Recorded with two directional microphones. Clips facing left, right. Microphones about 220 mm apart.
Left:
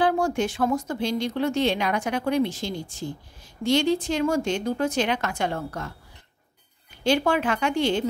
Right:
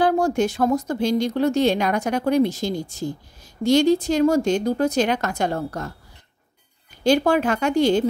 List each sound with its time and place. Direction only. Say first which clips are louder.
0.0 s speech: right 4 dB; 40° right (ahead or behind)
7.0 s speech: right 4 dB; 40° right (ahead or behind)